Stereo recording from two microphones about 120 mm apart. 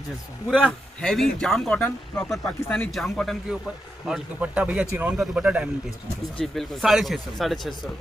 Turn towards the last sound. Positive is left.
turn(degrees=0)  # may be behind; listen again after turning